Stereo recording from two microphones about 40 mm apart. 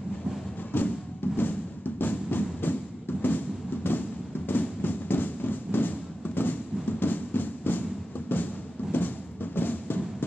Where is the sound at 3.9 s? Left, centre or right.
Left.